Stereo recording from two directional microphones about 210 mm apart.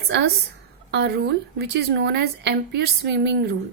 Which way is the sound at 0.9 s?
50° right (ahead or behind).